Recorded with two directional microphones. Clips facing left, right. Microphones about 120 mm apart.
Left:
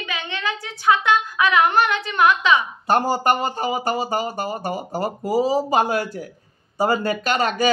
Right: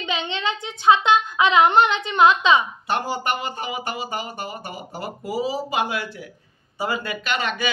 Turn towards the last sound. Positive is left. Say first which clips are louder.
# left 6 dB
turn(degrees=40)  # may be behind; listen again after turning